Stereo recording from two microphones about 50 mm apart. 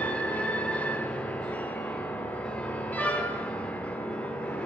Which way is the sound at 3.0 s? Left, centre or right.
Left.